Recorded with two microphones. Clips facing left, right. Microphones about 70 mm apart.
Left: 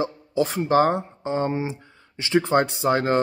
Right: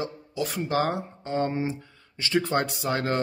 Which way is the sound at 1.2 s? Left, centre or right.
Centre.